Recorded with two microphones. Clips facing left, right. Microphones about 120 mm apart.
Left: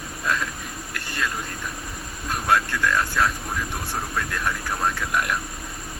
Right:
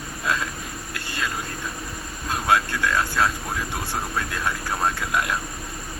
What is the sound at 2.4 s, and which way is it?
Speech, 15° right (ahead or behind).